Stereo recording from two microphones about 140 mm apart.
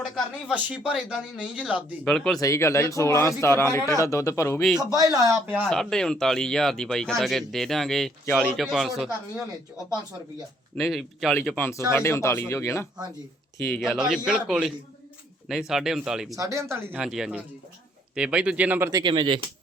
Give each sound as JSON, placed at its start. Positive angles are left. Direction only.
{"t": 0.4, "sound": "a man's voice", "side_deg": -10}
{"t": 2.0, "sound": "speech", "side_deg": 5}
{"t": 2.4, "sound": "a man's voice", "side_deg": 20}
{"t": 4.8, "sound": "speech", "side_deg": -25}
{"t": 5.6, "sound": "speech", "side_deg": 5}
{"t": 10.8, "sound": "speech", "side_deg": 0}
{"t": 11.5, "sound": "a man's voice", "side_deg": 15}
{"t": 13.9, "sound": "speech", "side_deg": -5}
{"t": 16.3, "sound": "speech", "side_deg": -20}
{"t": 17.0, "sound": "a man's voice", "side_deg": -5}
{"t": 19.0, "sound": "speech", "side_deg": -35}